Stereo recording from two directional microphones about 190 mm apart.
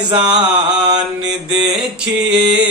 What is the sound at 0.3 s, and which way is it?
Mantra, 20° right (ahead or behind).